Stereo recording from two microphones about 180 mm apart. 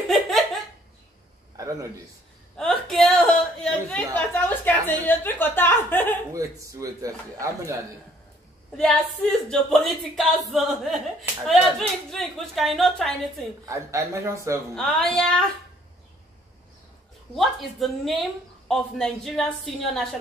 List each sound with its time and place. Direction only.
0.1 s laughter: centre (ahead or behind)
1.6 s a sound: 20° right (ahead or behind)
2.5 s speech: 5° left (ahead or behind)
6.3 s speech: 20° right (ahead or behind)
9.5 s a woman's voice: centre (ahead or behind)
13.7 s speech: 15° right (ahead or behind)
14.8 s a woman's voice: 5° left (ahead or behind)
17.4 s a woman's voice: centre (ahead or behind)